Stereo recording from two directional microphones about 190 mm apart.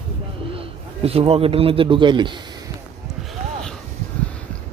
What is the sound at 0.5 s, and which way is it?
A man's voice, 30° right (ahead or behind).